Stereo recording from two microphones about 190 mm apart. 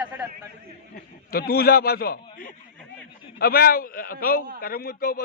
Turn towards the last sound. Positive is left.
turn(degrees=50)  # may be behind; listen again after turning